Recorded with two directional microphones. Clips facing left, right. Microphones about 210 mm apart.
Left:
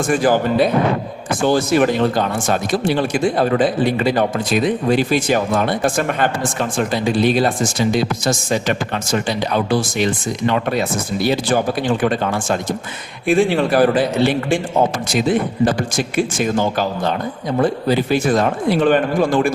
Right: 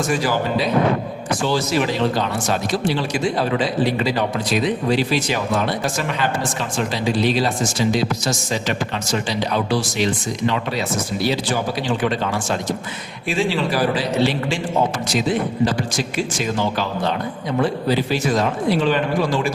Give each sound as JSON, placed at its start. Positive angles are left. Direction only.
{"t": 0.1, "sound": "speech", "side_deg": 50}